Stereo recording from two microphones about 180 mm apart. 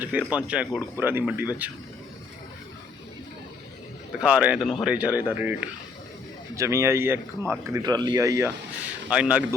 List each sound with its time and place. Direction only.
0.0 s speech: 10° right (ahead or behind)
4.2 s speech: 5° right (ahead or behind)
9.0 s speech: 5° right (ahead or behind)